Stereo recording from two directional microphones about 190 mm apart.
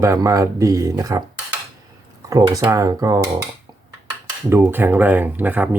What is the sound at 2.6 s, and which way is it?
Speech, 15° right (ahead or behind).